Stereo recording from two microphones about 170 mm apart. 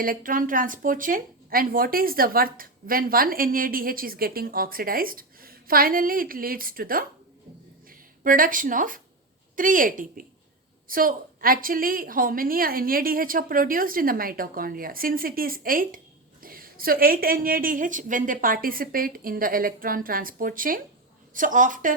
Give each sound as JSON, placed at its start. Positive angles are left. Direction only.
{"t": 0.0, "sound": "a woman's voice", "side_deg": -55}